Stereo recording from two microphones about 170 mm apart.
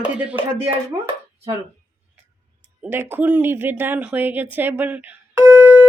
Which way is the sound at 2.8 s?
15° right (ahead or behind).